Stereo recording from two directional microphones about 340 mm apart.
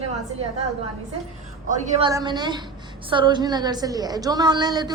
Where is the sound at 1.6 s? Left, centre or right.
Centre.